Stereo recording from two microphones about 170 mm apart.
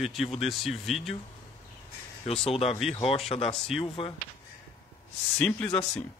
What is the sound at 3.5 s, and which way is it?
Speech, centre (ahead or behind).